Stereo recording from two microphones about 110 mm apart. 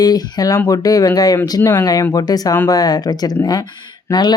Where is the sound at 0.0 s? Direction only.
35° left (ahead or behind).